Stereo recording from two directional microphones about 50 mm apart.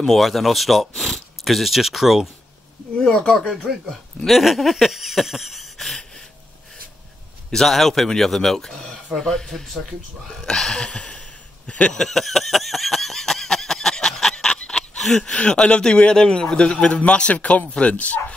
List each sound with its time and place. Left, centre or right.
0.0 s speech: centre
3.0 s a man's voice: centre
3.3 s speech: centre
7.5 s a man's voice: centre; by 11.9 s left
11.9 s a sound: centre
15.3 s a man's voice: centre